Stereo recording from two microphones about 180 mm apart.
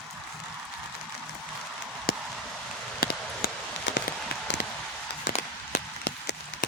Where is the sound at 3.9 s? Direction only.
90° left.